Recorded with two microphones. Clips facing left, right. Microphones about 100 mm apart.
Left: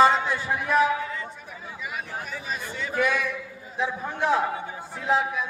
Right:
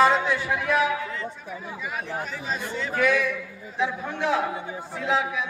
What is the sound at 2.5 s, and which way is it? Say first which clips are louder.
Speech: right 3 dB; 20° right (ahead or behind).